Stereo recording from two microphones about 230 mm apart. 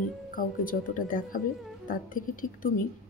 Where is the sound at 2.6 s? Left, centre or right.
Left.